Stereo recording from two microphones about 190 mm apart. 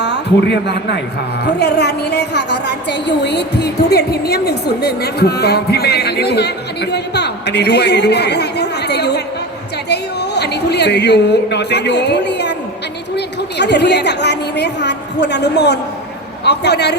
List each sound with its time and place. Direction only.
0.0 s a man's voice: 65° left (ahead or behind)